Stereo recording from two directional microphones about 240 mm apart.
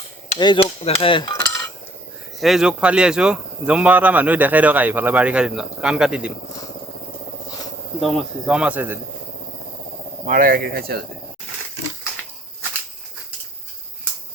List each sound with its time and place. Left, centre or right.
0.3 s dishes: centre
2.4 s speech: centre
8.0 s speech: centre
10.2 s speech: right